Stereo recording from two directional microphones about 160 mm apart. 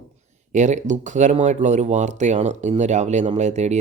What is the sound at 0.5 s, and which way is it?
A man's voice, 50° right (ahead or behind).